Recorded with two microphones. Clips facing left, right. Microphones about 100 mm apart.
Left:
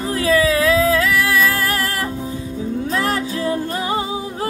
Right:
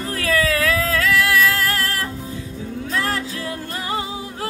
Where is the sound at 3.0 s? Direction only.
20° left (ahead or behind).